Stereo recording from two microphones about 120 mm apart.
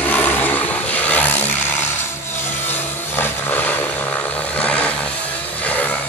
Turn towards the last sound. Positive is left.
turn(degrees=10)  # may be behind; listen again after turning